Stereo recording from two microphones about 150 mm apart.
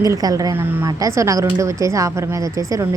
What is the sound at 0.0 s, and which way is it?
Speech, 25° right (ahead or behind).